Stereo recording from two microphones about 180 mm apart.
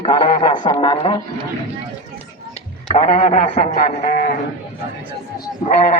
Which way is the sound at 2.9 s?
45° left (ahead or behind).